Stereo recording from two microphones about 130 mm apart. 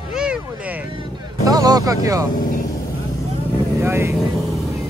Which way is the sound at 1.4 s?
30° right (ahead or behind).